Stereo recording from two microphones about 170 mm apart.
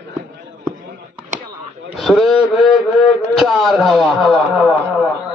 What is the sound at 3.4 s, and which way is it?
A man's voice, centre (ahead or behind).